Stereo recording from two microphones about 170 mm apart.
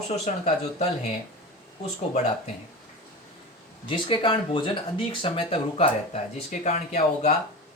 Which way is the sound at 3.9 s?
30° left (ahead or behind).